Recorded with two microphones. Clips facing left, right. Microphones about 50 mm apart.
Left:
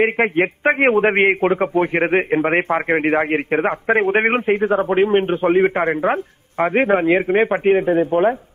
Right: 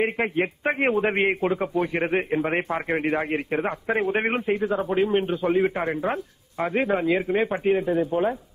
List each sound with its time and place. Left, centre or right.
0.0 s a man's voice: left